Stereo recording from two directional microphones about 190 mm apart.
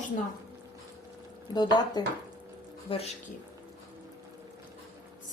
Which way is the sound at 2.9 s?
30° left (ahead or behind).